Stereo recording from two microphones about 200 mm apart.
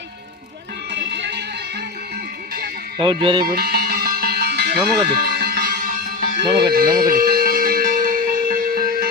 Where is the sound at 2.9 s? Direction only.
25° right (ahead or behind).